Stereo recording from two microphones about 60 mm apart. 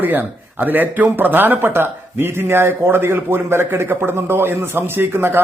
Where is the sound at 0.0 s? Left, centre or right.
Right.